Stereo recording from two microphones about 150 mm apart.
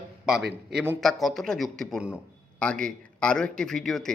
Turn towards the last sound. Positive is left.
turn(degrees=0)  # may be behind; listen again after turning